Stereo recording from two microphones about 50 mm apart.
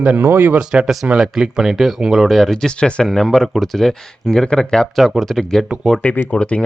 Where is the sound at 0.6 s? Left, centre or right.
Centre.